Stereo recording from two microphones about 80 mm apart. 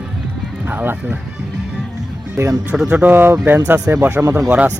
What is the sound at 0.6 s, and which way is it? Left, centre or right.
Speech, right.